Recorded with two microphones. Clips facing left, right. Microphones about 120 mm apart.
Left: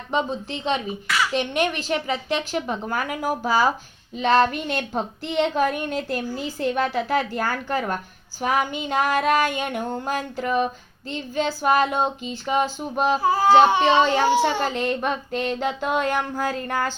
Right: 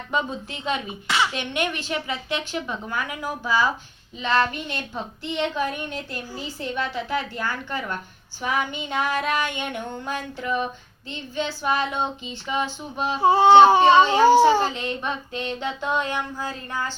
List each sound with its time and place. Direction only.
0.1 s speech: 30° left (ahead or behind)
1.0 s a child's voice: 25° right (ahead or behind)
1.3 s speech: 35° left (ahead or behind)
8.4 s a sound: 40° left (ahead or behind)
11.1 s speech: 40° left (ahead or behind)
13.2 s speech: 25° right (ahead or behind)
14.7 s speech: 45° left (ahead or behind)
16.6 s a sound: 65° left (ahead or behind)